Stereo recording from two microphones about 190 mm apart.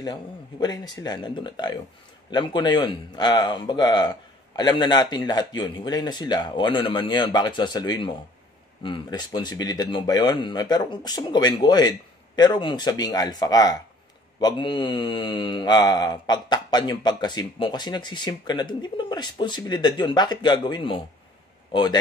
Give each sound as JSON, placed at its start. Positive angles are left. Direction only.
{"t": 0.0, "sound": "speech", "side_deg": 20}